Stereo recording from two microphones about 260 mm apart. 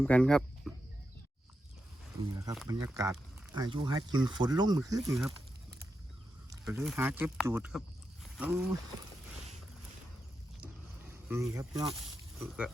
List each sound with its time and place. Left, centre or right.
0.0 s speech: centre
2.3 s speech: centre
6.5 s speech: centre
11.1 s speech: centre
12.4 s speech: centre